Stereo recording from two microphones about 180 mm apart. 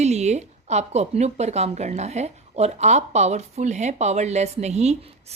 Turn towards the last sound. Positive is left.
turn(degrees=-35)  # may be behind; listen again after turning